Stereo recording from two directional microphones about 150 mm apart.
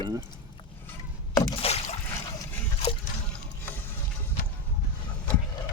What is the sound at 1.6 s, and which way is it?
Boat, 45° left (ahead or behind).